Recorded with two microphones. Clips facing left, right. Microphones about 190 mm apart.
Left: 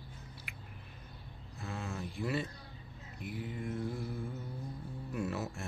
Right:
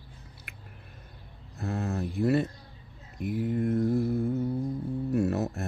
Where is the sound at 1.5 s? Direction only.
40° right (ahead or behind).